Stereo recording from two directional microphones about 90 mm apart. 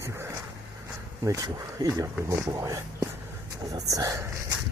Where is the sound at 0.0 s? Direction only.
30° right (ahead or behind).